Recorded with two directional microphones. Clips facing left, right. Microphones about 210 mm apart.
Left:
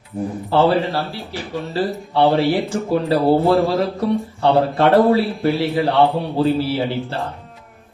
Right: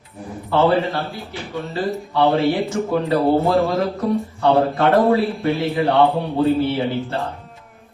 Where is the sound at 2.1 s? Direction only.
30° left (ahead or behind).